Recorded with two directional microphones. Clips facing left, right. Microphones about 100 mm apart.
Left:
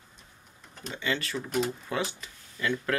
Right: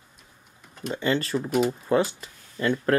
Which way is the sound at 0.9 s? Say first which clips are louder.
Right 7 dB; 40° right (ahead or behind).